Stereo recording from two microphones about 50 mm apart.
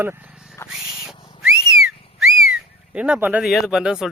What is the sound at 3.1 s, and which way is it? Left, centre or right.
Speech, right.